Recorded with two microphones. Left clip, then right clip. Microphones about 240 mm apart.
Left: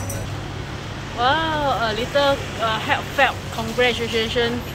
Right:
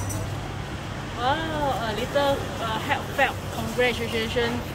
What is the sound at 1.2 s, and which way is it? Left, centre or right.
Speech, centre.